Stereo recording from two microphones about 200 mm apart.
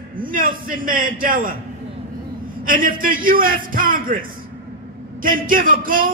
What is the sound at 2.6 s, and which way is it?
Speech, 45° right (ahead or behind).